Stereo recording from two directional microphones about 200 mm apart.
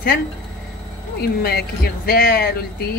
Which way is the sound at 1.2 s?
50° left (ahead or behind).